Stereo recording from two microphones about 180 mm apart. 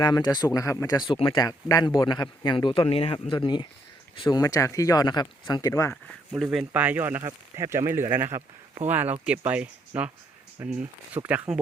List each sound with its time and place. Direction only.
0.0 s speech: 20° left (ahead or behind)
5.9 s speech: centre (ahead or behind)
7.2 s speech: 20° right (ahead or behind)
8.4 s speech: 35° right (ahead or behind)
8.9 s speech: 10° right (ahead or behind)